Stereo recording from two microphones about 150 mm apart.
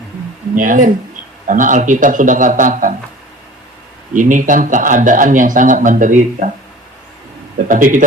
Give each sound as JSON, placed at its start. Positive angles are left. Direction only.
{"t": 0.5, "sound": "speech", "side_deg": -60}
{"t": 4.1, "sound": "speech", "side_deg": -60}
{"t": 7.7, "sound": "speech", "side_deg": -60}